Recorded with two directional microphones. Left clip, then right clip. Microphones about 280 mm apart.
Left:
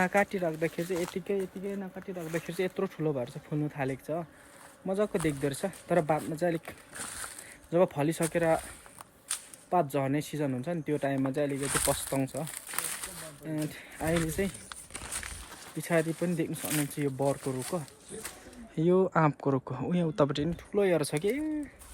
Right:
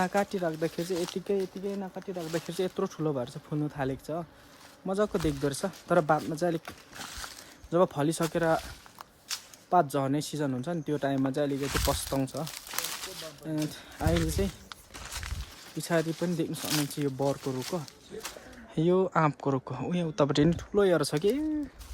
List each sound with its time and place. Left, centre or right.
0.0 s speech: centre
9.6 s speech: centre
11.7 s speech: centre
12.1 s speech: centre
12.5 s a sound: centre
13.5 s speech: centre
15.8 s speech: centre
20.3 s speech: right
20.7 s speech: centre